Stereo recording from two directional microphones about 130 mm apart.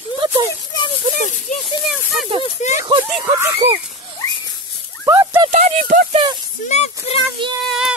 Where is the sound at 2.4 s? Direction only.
60° left (ahead or behind).